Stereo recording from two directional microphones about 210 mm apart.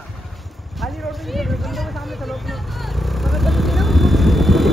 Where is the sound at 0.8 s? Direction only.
Centre (ahead or behind).